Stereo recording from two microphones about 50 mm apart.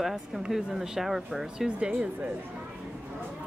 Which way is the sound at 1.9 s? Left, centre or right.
Right.